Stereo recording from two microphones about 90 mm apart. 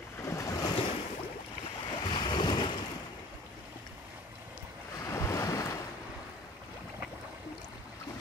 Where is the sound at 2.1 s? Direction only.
55° left (ahead or behind).